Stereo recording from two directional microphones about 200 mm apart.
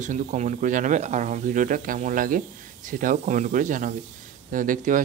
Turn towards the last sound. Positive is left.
turn(degrees=-40)  # may be behind; listen again after turning